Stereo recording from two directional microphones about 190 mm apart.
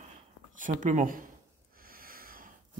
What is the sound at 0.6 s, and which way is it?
Speech, 40° right (ahead or behind).